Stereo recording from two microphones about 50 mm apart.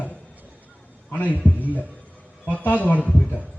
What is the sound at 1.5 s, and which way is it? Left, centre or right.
A man's voice, left.